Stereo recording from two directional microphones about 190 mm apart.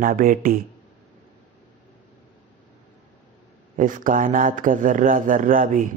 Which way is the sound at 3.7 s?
45° right (ahead or behind).